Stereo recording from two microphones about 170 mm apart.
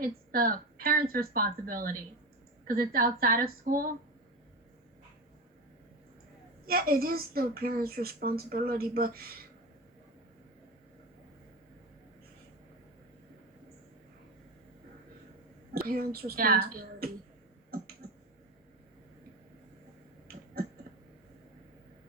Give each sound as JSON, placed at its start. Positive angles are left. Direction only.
{"t": 0.0, "sound": "a woman's voice", "side_deg": -55}
{"t": 6.7, "sound": "a woman's voice", "side_deg": -60}
{"t": 15.7, "sound": "a woman's voice", "side_deg": -60}